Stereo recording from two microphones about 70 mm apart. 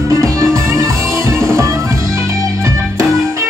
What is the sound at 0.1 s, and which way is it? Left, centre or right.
Music, right.